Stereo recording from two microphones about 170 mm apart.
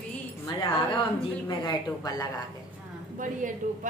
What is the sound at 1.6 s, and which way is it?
Speech, 20° left (ahead or behind).